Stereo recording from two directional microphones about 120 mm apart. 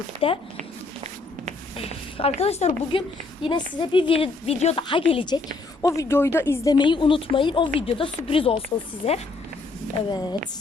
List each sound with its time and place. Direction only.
0.2 s speech: 50° left (ahead or behind)
1.7 s speech: 55° left (ahead or behind)
2.9 s a woman's voice: 50° left (ahead or behind)
5.8 s speech: 25° left (ahead or behind)
6.7 s speech: 40° left (ahead or behind); by 9.2 s 60° left (ahead or behind)
10.1 s a woman's voice: 35° left (ahead or behind)